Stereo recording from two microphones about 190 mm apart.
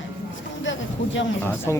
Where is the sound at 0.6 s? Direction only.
75° left (ahead or behind).